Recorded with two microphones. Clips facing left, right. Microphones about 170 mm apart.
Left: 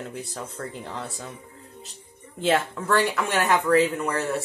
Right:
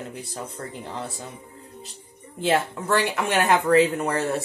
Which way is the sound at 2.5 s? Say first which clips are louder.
Even; 15° right (ahead or behind).